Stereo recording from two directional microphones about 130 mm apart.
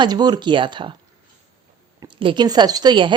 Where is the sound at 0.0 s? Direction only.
35° right (ahead or behind).